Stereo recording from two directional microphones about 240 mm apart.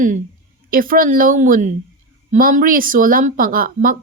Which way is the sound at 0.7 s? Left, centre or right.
Right.